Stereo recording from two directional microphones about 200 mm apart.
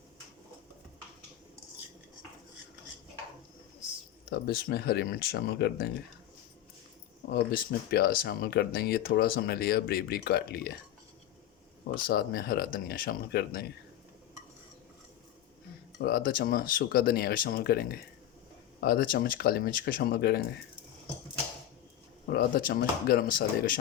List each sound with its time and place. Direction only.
4.3 s speech: 50° left (ahead or behind)
7.3 s speech: 50° left (ahead or behind)
12.0 s speech: 50° left (ahead or behind)
16.0 s speech: 50° left (ahead or behind)
22.3 s speech: 45° left (ahead or behind)